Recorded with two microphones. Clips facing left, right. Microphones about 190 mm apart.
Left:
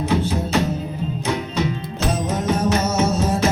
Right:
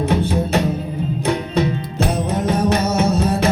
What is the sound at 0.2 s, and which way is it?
Music, 60° right (ahead or behind).